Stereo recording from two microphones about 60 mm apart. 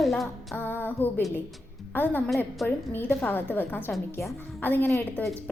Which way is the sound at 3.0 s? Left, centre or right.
Left.